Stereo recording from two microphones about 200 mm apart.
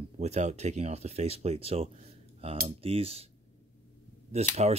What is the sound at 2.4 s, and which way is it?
Cutlery, 30° right (ahead or behind).